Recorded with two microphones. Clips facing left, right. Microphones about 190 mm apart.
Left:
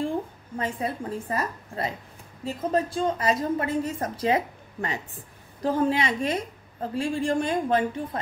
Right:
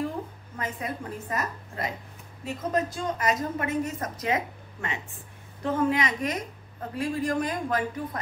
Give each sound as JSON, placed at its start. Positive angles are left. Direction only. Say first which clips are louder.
{"t": 0.6, "sound": "a woman's voice", "louder": "left 4 dB", "side_deg": 30}